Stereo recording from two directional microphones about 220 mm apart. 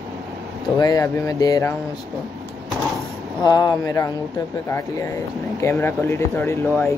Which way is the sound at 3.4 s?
20° left (ahead or behind).